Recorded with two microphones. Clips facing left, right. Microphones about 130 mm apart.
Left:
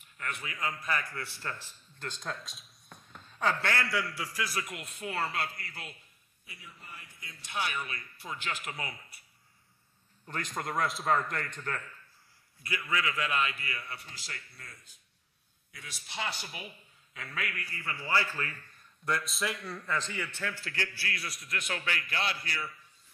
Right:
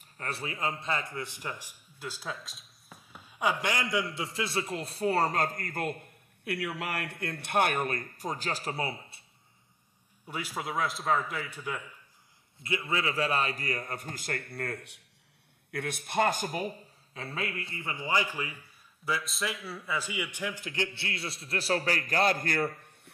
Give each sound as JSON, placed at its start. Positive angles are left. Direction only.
{"t": 0.0, "sound": "a man's voice", "side_deg": -35}
{"t": 10.2, "sound": "a man's voice", "side_deg": -10}
{"t": 12.5, "sound": "a man's voice", "side_deg": -25}
{"t": 15.7, "sound": "a man's voice", "side_deg": -55}